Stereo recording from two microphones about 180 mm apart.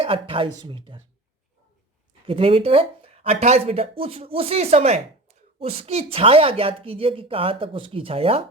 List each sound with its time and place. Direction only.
0.0 s speech: 30° right (ahead or behind)
2.2 s speech: 30° right (ahead or behind)